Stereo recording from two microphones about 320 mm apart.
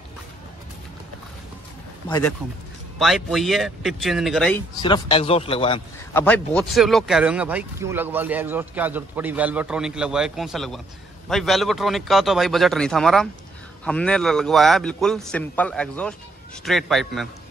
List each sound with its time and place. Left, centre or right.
2.0 s a man's voice: centre
3.0 s speech: centre
4.8 s a man's voice: centre
6.2 s speech: centre